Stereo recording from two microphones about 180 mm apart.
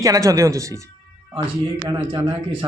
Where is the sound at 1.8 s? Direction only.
30° right (ahead or behind).